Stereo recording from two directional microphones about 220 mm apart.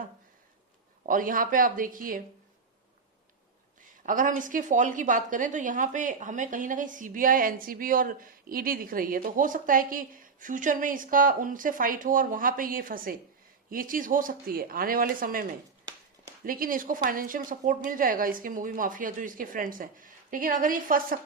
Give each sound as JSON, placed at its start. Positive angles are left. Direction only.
{"t": 1.0, "sound": "a woman's voice", "side_deg": -40}
{"t": 4.0, "sound": "a woman's voice", "side_deg": -35}